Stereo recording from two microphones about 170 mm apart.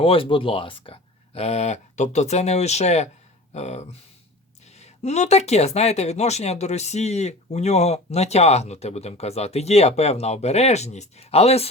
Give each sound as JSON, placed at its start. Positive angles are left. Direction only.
{"t": 0.0, "sound": "speech", "side_deg": 30}